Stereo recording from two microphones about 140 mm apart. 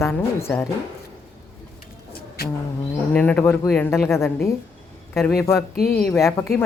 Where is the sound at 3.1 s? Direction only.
10° left (ahead or behind).